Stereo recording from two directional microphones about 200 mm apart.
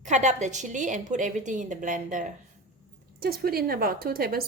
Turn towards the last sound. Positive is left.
turn(degrees=-50)  # may be behind; listen again after turning